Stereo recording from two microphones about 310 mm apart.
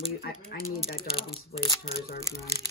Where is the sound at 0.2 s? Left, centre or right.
Left.